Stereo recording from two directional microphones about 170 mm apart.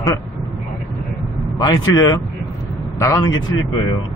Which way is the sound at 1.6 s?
20° left (ahead or behind).